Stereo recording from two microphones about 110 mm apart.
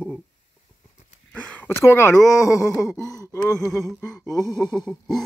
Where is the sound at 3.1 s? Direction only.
30° left (ahead or behind).